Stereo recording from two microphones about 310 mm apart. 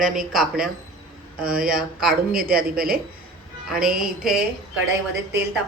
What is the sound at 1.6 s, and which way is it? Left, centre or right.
Speech, right.